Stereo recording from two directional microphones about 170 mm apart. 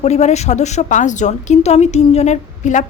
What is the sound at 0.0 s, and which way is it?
A woman's voice, 40° left (ahead or behind).